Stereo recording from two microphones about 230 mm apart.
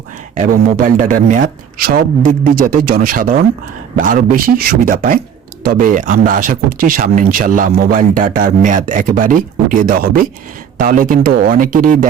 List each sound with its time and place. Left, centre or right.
0.3 s speech: right